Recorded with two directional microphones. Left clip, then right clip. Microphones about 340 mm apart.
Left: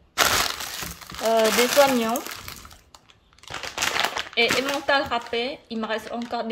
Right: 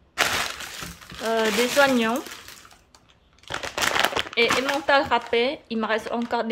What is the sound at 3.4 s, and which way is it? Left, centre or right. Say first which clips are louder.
Crumpling: right 2 dB; centre.